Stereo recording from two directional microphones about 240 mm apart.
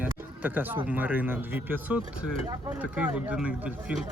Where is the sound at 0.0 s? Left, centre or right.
Centre.